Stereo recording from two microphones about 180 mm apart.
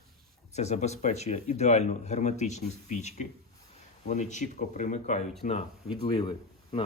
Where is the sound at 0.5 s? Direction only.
40° left (ahead or behind).